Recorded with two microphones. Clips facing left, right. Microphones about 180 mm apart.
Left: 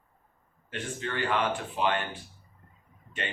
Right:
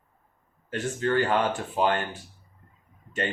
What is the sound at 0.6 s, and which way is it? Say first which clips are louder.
Speech: right 8 dB; 40° right (ahead or behind).